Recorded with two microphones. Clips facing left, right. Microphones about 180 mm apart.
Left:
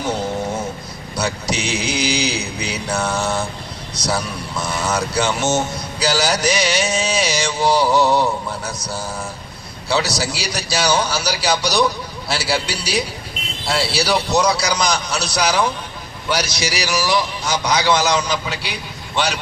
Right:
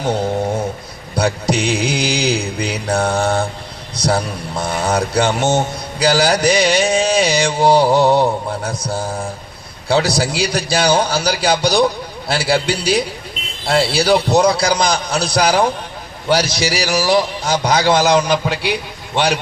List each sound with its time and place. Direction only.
1.1 s a man's voice: 55° right (ahead or behind)